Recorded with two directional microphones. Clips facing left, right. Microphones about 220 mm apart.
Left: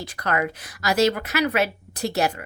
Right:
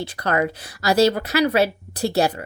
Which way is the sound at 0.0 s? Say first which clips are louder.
Right 3 dB; 30° right (ahead or behind).